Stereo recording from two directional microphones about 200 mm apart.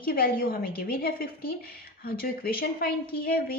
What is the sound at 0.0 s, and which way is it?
A woman's voice, 50° left (ahead or behind).